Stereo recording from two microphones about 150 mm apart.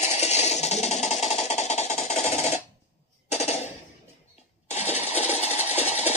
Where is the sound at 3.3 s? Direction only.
45° left (ahead or behind).